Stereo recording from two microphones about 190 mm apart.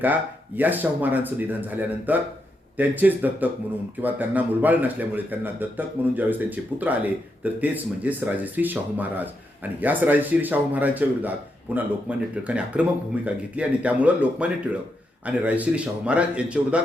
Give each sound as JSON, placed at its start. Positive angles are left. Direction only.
{"t": 0.0, "sound": "a man's voice", "side_deg": -10}